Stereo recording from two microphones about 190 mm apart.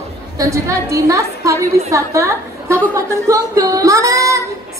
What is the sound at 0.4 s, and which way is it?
A woman's voice, 15° right (ahead or behind).